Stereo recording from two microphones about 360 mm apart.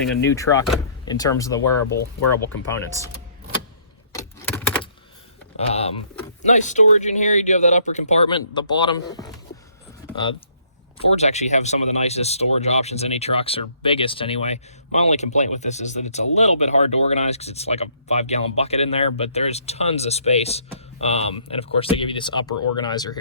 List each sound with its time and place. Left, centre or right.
0.3 s speech: centre
4.1 s a sound: centre
6.4 s speech: centre
11.0 s speech: centre
22.5 s speech: left
22.8 s speech: centre